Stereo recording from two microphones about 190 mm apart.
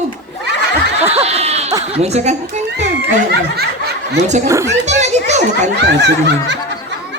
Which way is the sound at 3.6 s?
60° right (ahead or behind).